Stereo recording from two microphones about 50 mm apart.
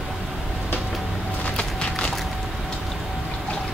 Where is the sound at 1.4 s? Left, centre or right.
Left.